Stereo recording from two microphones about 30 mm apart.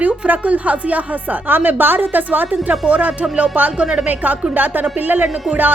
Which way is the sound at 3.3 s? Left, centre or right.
Right.